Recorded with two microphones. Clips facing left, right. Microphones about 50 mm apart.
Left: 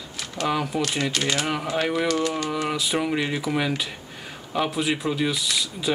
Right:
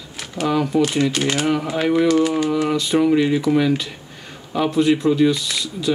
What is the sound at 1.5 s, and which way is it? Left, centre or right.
Speech, centre.